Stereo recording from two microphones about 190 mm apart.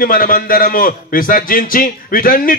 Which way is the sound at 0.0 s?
50° left (ahead or behind).